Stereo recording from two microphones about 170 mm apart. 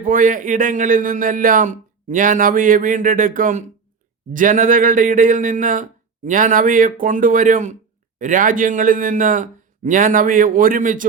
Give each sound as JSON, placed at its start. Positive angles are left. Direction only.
{"t": 0.0, "sound": "a man's voice", "side_deg": -55}